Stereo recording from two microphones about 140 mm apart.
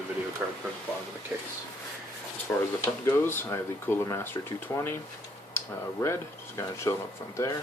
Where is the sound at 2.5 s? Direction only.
15° left (ahead or behind).